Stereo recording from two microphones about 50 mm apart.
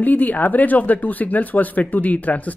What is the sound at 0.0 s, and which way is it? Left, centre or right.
Speech, left.